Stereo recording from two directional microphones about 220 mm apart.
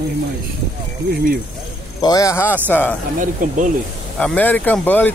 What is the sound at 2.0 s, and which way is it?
Speech, 15° left (ahead or behind).